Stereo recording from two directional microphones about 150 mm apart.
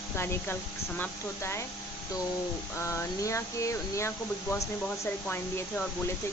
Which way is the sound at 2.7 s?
20° left (ahead or behind).